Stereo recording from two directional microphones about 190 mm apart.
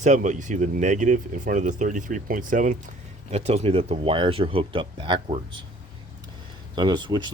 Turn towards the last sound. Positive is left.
turn(degrees=-25)  # may be behind; listen again after turning